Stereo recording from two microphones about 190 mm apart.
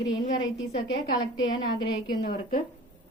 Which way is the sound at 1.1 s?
25° left (ahead or behind).